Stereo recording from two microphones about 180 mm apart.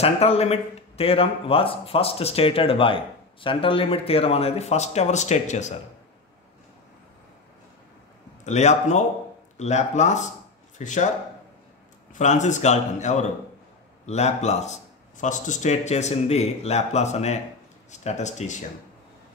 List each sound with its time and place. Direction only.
0.0 s speech: 35° left (ahead or behind)
8.5 s speech: 40° left (ahead or behind)
12.1 s speech: 40° left (ahead or behind)